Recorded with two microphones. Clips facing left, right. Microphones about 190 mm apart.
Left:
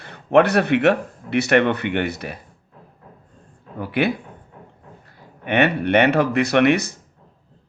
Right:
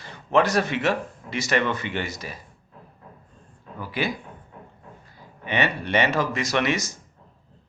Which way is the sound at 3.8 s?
60° left (ahead or behind).